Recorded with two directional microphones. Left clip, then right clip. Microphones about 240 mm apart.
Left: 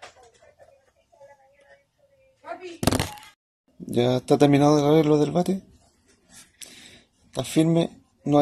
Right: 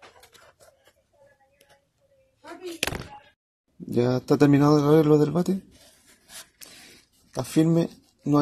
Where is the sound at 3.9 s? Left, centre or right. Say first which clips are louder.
Left 2 dB; right.